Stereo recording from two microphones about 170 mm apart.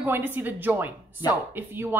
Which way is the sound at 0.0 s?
10° right (ahead or behind).